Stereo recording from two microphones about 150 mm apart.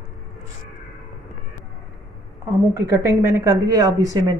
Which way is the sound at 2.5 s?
20° right (ahead or behind).